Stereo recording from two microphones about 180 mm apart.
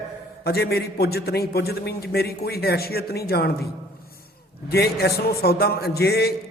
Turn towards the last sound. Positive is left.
turn(degrees=65)  # may be behind; listen again after turning